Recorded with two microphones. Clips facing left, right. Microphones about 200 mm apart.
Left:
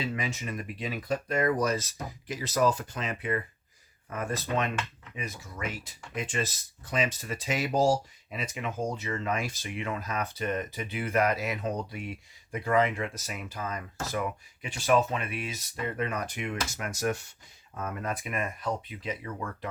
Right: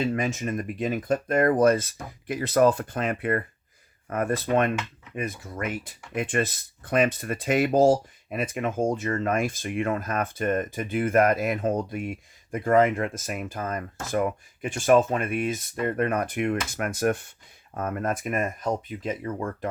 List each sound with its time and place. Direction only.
0.0 s speech: 50° right (ahead or behind)